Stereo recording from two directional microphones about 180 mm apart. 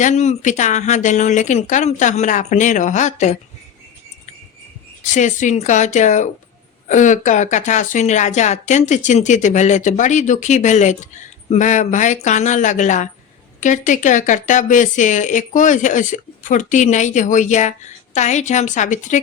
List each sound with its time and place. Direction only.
0.0 s a woman's voice: 40° left (ahead or behind)
5.1 s a woman's voice: 45° left (ahead or behind)